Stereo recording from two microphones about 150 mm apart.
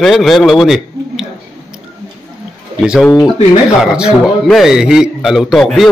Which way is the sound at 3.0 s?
20° left (ahead or behind).